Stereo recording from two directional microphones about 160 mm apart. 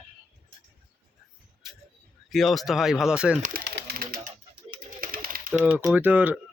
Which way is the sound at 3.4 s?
80° right.